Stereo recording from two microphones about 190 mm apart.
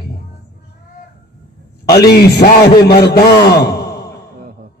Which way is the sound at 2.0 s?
55° left (ahead or behind).